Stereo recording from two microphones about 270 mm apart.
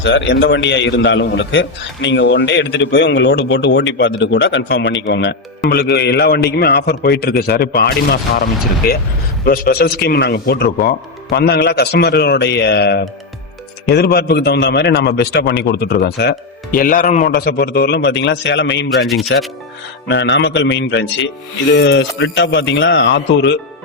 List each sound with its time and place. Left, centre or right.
0.0 s a man's voice: left
19.0 s speech: centre
20.1 s a man's voice: left